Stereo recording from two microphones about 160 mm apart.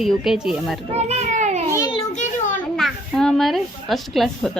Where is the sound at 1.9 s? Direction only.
50° left (ahead or behind).